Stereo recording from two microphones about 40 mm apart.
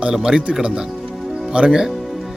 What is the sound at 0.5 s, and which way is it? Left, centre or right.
A man's voice, right.